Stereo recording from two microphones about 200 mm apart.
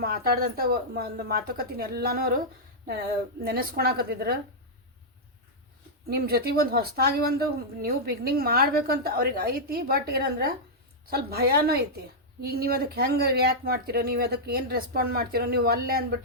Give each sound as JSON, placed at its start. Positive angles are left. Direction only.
{"t": 0.0, "sound": "speech", "side_deg": -50}
{"t": 3.4, "sound": "speech", "side_deg": -50}
{"t": 6.1, "sound": "speech", "side_deg": -50}